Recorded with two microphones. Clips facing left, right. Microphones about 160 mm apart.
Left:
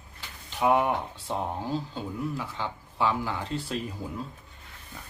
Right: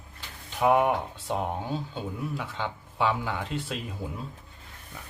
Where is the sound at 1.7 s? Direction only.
Centre (ahead or behind).